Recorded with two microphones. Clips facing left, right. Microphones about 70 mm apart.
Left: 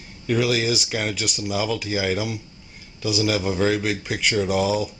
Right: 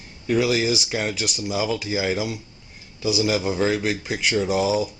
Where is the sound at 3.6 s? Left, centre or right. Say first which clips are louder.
Left 1 dB; centre.